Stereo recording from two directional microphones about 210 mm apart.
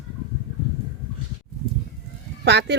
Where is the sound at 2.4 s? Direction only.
55° right (ahead or behind).